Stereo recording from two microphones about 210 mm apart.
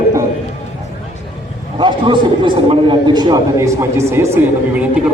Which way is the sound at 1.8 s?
20° right (ahead or behind).